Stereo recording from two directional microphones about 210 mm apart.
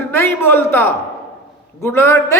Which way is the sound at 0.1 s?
10° left (ahead or behind).